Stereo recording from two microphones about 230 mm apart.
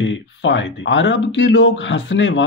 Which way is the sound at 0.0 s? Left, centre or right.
Left.